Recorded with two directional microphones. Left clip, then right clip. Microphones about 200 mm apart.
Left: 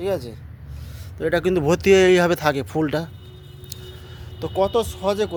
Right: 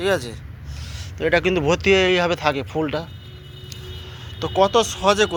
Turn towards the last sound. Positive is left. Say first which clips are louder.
# right 5 dB
turn(degrees=-5)  # may be behind; listen again after turning